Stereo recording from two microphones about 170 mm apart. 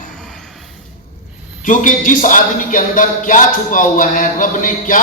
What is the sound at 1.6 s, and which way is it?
Speech, 50° left (ahead or behind).